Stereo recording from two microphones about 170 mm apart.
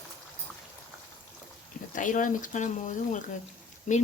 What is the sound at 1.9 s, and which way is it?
Speech, 50° left (ahead or behind).